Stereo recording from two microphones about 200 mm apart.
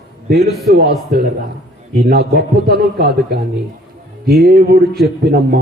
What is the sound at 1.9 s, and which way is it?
A man's voice, 50° right (ahead or behind).